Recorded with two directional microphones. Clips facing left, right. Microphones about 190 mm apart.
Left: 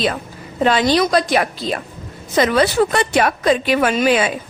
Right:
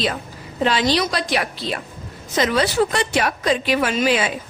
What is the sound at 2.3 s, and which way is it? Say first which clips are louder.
A woman's voice: left 4 dB; 55° left (ahead or behind).